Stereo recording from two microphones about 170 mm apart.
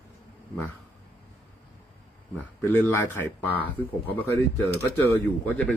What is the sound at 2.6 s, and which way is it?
Speech, 10° left (ahead or behind).